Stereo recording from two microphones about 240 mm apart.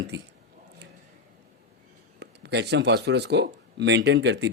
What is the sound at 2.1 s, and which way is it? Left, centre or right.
A man's voice, right.